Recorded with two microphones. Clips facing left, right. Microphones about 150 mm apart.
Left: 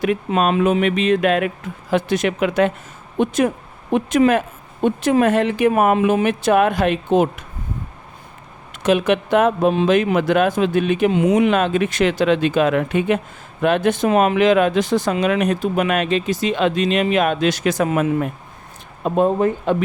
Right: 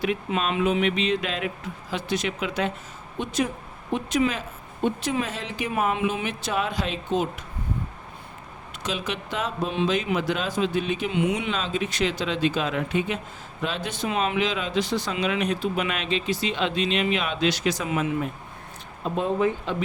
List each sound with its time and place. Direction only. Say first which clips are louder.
0.0 s speech: left 8 dB; 50° left (ahead or behind)
8.8 s speech: left 14 dB; 55° left (ahead or behind)
11.1 s speech: left 7 dB; 40° left (ahead or behind)
11.4 s speech: left 11 dB; 60° left (ahead or behind)